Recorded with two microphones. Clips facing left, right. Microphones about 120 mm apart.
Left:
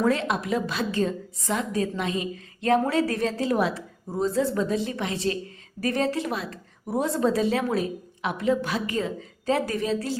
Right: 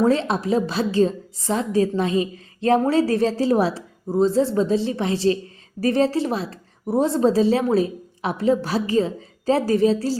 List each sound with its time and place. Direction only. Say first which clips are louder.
0.0 s a woman's voice: right 5 dB; 30° right (ahead or behind)